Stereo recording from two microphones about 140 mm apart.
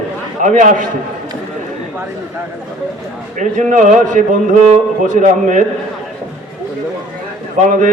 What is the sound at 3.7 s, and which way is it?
A man's voice, 70° right (ahead or behind).